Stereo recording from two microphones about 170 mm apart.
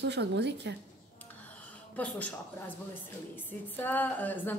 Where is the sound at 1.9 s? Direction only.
10° left (ahead or behind).